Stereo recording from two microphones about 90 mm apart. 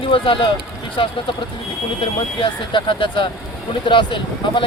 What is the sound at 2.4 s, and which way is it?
Speech, 65° left (ahead or behind).